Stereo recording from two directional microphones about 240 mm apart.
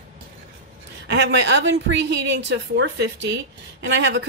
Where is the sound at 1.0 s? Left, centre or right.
Right.